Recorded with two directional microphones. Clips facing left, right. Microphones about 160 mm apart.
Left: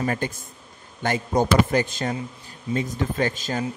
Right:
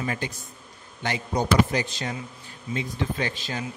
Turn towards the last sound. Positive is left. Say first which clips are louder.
# left 5 dB
turn(degrees=45)  # may be behind; listen again after turning